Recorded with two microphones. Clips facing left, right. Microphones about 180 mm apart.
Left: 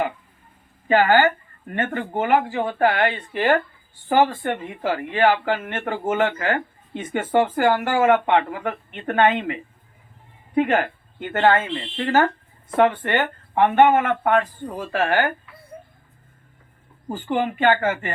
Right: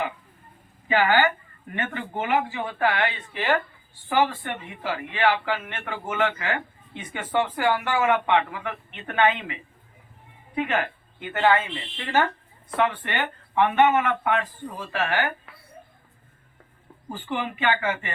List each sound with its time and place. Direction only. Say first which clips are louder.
0.9 s a woman's voice: left 4 dB; 45° left (ahead or behind)
17.1 s a woman's voice: left 6 dB; 45° left (ahead or behind)